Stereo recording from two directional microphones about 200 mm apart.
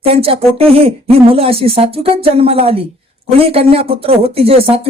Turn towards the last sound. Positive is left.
turn(degrees=-30)  # may be behind; listen again after turning